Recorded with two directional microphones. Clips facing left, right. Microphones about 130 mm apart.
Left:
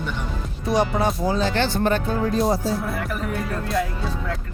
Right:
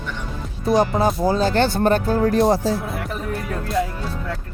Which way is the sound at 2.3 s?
65° right (ahead or behind).